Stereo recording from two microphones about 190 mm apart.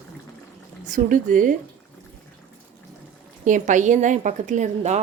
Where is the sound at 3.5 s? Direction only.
40° right (ahead or behind).